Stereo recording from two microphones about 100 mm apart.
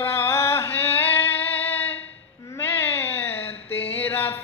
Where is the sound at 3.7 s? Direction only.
80° left.